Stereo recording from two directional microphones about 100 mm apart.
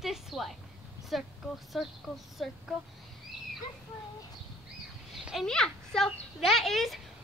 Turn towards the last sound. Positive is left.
turn(degrees=0)  # may be behind; listen again after turning